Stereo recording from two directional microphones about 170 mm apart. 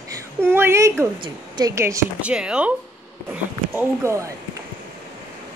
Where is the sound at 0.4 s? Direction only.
10° right (ahead or behind).